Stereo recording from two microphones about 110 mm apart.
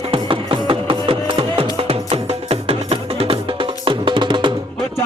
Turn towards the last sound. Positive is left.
turn(degrees=-45)  # may be behind; listen again after turning